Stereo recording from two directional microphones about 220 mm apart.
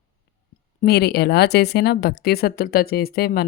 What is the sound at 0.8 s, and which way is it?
Speech, 45° left (ahead or behind).